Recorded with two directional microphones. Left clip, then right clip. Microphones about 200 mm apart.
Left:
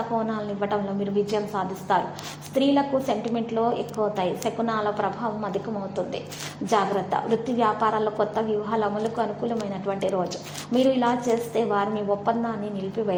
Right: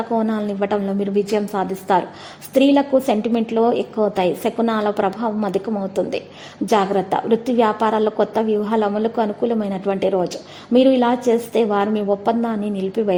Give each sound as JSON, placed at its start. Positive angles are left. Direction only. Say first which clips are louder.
{"t": 0.2, "sound": "a woman's voice", "louder": "right 6 dB", "side_deg": -45}
{"t": 6.7, "sound": "a woman's voice", "louder": "right 6 dB", "side_deg": -45}